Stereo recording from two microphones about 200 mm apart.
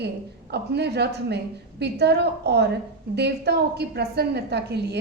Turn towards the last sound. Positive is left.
turn(degrees=-55)  # may be behind; listen again after turning